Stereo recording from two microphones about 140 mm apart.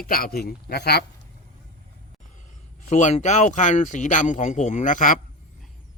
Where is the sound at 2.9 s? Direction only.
60° left (ahead or behind).